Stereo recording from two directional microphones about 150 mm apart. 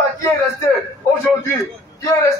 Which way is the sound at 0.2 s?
20° left (ahead or behind).